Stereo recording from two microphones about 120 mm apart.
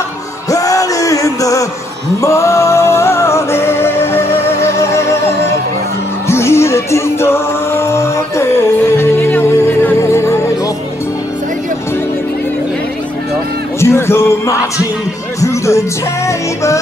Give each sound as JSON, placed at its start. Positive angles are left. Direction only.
{"t": 0.5, "sound": "music", "side_deg": 30}
{"t": 13.7, "sound": "music", "side_deg": 20}